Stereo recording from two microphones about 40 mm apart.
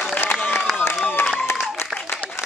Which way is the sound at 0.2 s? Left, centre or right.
Left.